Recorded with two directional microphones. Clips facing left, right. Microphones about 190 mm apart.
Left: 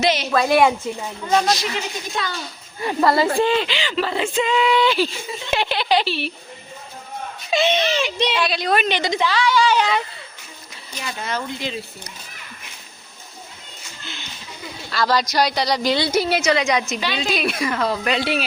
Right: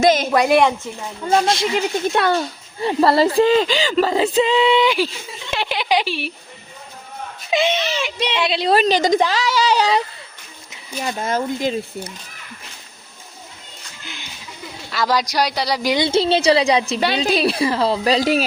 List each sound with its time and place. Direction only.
0.0 s speech: 50° right (ahead or behind)
0.3 s speech: 10° right (ahead or behind)
1.3 s speech: 25° right (ahead or behind)
2.1 s a child's voice: 60° right (ahead or behind)
2.8 s speech: 30° right (ahead or behind)
4.8 s speech: 15° right (ahead or behind)
7.5 s speech: 15° right (ahead or behind)
8.4 s speech: 25° right (ahead or behind)
11.0 s speech: 45° right (ahead or behind)
14.0 s a sound: 15° right (ahead or behind)
14.8 s speech: 10° right (ahead or behind)
16.0 s speech: 25° right (ahead or behind)